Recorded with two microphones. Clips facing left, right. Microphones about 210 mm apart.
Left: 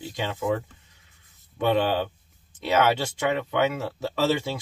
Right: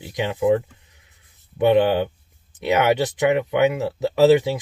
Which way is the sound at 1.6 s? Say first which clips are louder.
Right 6 dB; 15° right (ahead or behind).